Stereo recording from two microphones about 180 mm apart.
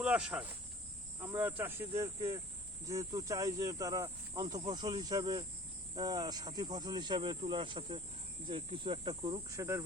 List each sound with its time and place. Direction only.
0.0 s cricket: 5° right (ahead or behind)
1.2 s speech: 10° right (ahead or behind)